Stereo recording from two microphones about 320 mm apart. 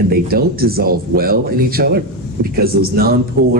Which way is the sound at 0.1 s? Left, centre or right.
Right.